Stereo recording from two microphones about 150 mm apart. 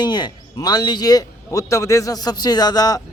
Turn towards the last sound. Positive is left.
turn(degrees=25)  # may be behind; listen again after turning